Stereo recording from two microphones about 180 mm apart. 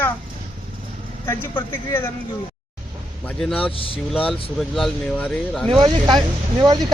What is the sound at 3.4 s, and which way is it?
Speech, 5° left (ahead or behind).